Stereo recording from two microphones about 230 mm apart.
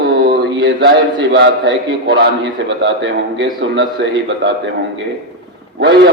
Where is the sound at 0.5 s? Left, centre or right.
Right.